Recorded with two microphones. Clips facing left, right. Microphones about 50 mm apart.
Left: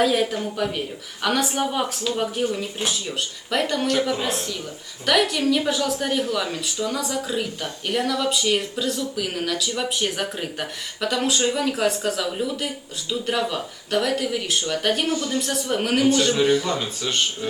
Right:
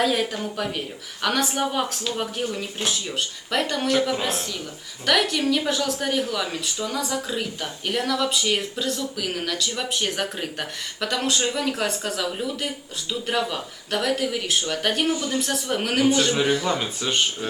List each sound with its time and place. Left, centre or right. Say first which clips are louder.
0.0 s a woman's voice: left 2 dB; centre
15.1 s a man's voice: left 1 dB; centre
15.4 s a woman's voice: left 1 dB; centre